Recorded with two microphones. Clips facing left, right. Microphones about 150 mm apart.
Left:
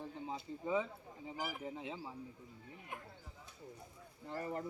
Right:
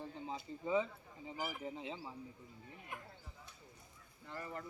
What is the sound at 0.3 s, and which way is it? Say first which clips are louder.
Speech: right 1 dB; centre (ahead or behind).